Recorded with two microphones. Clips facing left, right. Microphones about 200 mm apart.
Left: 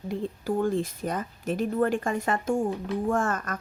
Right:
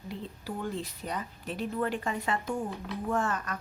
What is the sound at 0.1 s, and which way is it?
A woman's voice, 50° left (ahead or behind).